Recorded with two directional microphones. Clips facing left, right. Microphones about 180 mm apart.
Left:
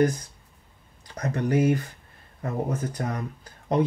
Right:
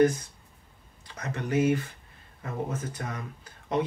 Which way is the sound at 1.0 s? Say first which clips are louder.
Left 7 dB; 40° left (ahead or behind).